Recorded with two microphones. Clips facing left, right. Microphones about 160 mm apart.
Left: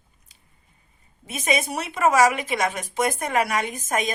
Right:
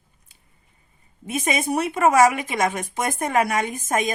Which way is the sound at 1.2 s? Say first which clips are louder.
Right 1 dB; 50° right (ahead or behind).